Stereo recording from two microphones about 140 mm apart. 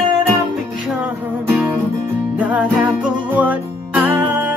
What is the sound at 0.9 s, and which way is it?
Music, 10° right (ahead or behind).